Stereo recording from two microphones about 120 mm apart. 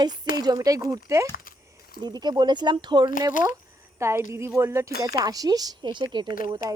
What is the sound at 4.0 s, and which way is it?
A woman's voice, 25° right (ahead or behind).